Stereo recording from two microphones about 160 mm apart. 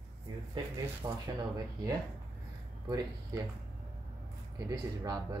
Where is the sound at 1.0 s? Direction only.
25° right (ahead or behind).